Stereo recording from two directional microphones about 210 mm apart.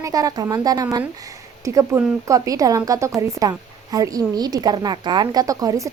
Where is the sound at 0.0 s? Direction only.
15° right (ahead or behind).